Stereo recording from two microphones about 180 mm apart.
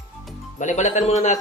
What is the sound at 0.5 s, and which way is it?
Speech, 40° left (ahead or behind).